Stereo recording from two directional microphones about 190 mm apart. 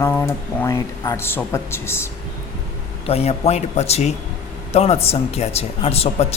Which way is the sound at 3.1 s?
35° left (ahead or behind).